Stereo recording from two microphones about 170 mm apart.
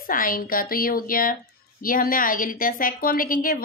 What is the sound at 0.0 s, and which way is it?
A woman's voice, 55° left (ahead or behind).